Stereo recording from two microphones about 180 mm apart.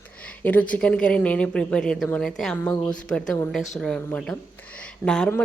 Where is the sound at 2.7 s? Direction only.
20° left (ahead or behind).